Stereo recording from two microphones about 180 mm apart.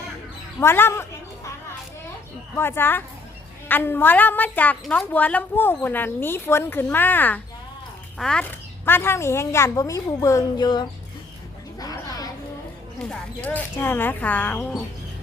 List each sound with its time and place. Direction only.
0.6 s a woman's voice: 15° left (ahead or behind)
2.6 s a woman's voice: 10° left (ahead or behind)
11.8 s a sound: 20° left (ahead or behind)
13.0 s a woman's voice: 5° left (ahead or behind)